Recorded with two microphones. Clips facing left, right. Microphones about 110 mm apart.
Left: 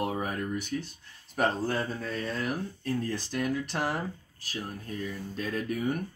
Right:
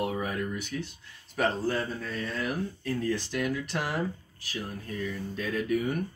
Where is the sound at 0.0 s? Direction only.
40° left (ahead or behind).